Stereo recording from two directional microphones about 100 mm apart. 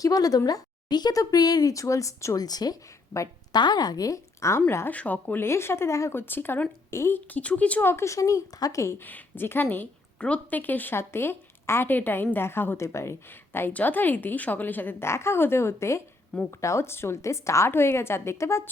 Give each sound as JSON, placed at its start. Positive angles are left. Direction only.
{"t": 0.0, "sound": "a woman's voice", "side_deg": 35}
{"t": 9.0, "sound": "a woman's voice", "side_deg": 20}